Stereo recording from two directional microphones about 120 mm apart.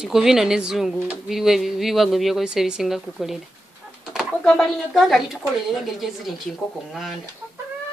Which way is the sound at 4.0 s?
5° right (ahead or behind).